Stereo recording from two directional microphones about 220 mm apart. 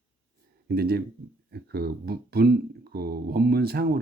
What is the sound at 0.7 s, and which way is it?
Speech, 45° right (ahead or behind).